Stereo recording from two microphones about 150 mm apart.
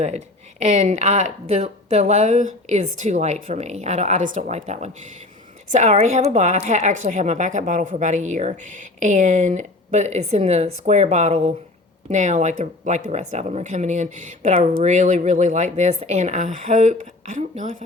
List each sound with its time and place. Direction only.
0.8 s a woman's voice: 50° right (ahead or behind)